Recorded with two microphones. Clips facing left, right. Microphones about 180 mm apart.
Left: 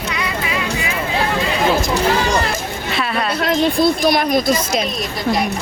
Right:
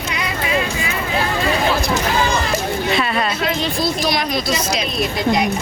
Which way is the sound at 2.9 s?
Centre (ahead or behind).